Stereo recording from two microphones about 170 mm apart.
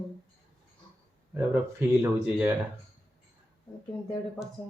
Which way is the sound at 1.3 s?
10° right (ahead or behind).